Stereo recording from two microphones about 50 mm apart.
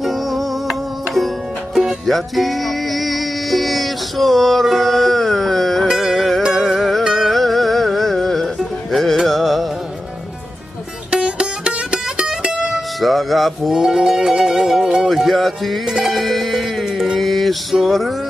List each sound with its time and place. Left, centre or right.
0.0 s music: centre
5.9 s music: centre
11.1 s music: centre
13.0 s music: centre